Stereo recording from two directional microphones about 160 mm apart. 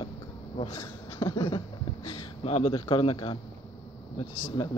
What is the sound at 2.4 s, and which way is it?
A man's voice, 40° left (ahead or behind).